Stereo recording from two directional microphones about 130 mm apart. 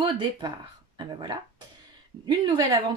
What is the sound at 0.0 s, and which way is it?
Speech, 40° right (ahead or behind).